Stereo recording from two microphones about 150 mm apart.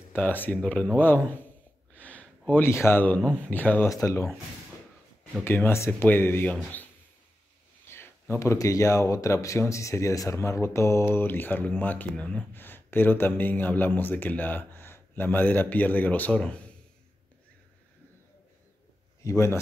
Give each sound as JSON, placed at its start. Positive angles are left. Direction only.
{"t": 0.1, "sound": "speech", "side_deg": 10}
{"t": 2.0, "sound": "a sound", "side_deg": 10}
{"t": 3.4, "sound": "speech", "side_deg": 10}
{"t": 5.4, "sound": "speech", "side_deg": 15}
{"t": 19.2, "sound": "speech", "side_deg": 20}